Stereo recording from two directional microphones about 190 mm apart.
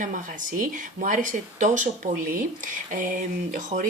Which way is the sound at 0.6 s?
45° right (ahead or behind).